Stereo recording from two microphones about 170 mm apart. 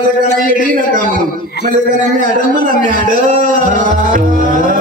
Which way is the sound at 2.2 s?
55° right (ahead or behind).